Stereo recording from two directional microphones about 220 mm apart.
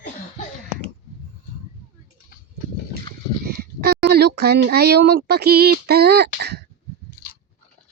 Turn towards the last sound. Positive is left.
turn(degrees=-50)  # may be behind; listen again after turning